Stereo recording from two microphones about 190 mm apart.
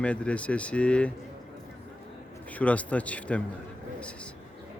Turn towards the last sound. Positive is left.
turn(degrees=5)  # may be behind; listen again after turning